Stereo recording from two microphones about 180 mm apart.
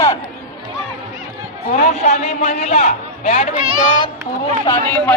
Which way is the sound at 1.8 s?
40° left (ahead or behind).